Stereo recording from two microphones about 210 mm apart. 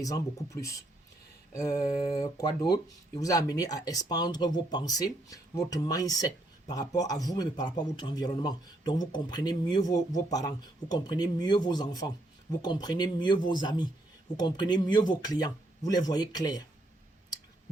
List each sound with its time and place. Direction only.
0.0 s speech: 15° left (ahead or behind)
2.2 s a man's voice: 15° left (ahead or behind)